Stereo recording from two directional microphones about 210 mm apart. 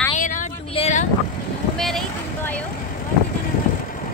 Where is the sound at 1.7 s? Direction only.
Centre (ahead or behind).